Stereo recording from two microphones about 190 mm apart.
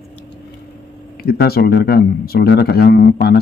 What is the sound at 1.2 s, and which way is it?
Speech, 55° left (ahead or behind).